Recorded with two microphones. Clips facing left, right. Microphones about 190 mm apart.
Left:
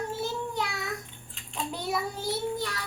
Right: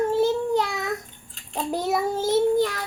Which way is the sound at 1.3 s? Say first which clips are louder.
Right 8 dB; 40° right (ahead or behind).